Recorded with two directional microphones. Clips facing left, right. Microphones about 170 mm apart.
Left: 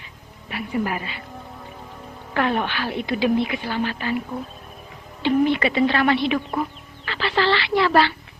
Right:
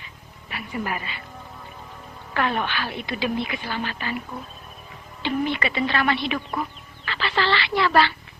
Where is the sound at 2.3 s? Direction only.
30° left (ahead or behind).